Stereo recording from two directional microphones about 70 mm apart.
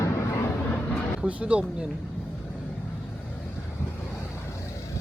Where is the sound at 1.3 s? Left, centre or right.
Centre.